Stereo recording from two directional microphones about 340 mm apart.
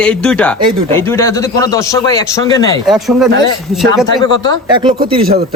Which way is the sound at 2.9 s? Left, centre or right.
Centre.